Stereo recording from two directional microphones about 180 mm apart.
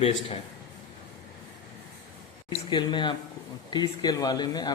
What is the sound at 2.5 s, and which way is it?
Speech, 25° left (ahead or behind).